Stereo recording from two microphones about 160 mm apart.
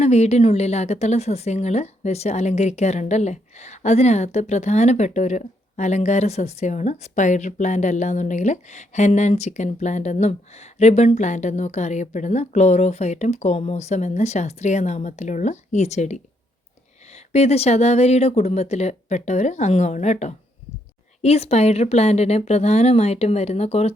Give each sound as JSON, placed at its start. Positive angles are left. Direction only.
{"t": 0.0, "sound": "a woman's voice", "side_deg": 40}
{"t": 17.3, "sound": "a woman's voice", "side_deg": 40}